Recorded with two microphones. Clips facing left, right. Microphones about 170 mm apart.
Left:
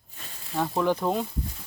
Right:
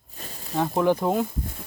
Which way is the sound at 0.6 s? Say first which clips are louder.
Right 3 dB; 15° right (ahead or behind).